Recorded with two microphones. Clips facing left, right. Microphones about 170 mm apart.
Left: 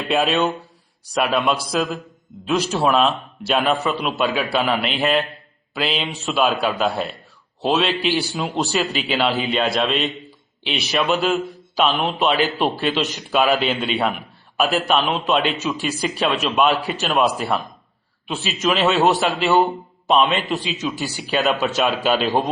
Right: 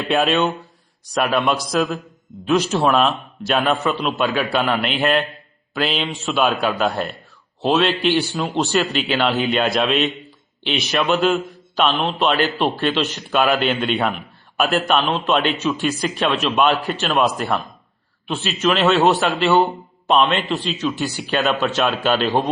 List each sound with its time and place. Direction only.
0.1 s speech: centre (ahead or behind)